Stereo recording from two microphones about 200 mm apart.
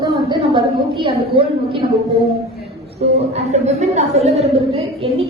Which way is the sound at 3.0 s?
35° right (ahead or behind).